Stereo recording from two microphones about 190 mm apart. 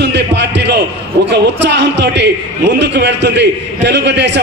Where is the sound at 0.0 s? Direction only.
65° right (ahead or behind).